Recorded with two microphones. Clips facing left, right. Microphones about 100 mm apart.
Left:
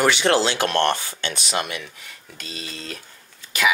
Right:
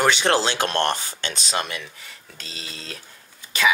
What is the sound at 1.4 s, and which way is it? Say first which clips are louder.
Speech: even; 30° right (ahead or behind).